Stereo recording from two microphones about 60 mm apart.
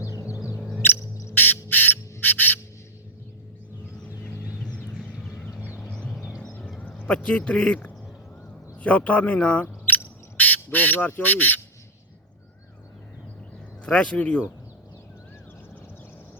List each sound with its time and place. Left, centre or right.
0.2 s music: left
0.8 s owl: left
1.3 s squawk: left
1.7 s owl: left
5.8 s a sound: centre
7.1 s speech: centre
13.8 s speech: centre